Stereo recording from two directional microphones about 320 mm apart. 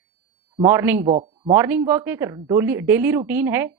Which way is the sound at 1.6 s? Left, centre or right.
Centre.